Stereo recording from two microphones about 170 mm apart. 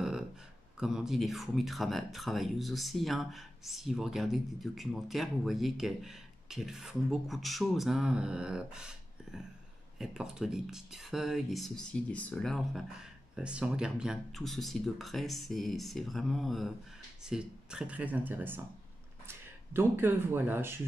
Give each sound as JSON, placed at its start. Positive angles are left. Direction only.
{"t": 0.7, "sound": "speech", "side_deg": -5}